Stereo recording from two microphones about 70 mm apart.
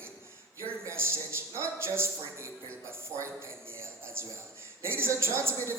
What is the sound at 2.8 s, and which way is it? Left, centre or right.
A man's voice, right.